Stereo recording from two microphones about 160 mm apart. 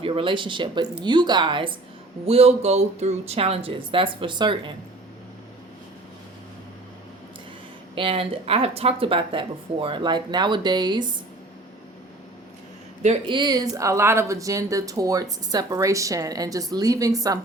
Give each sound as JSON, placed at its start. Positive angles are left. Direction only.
{"t": 0.0, "sound": "speech", "side_deg": -30}
{"t": 7.9, "sound": "speech", "side_deg": -35}
{"t": 13.2, "sound": "speech", "side_deg": -30}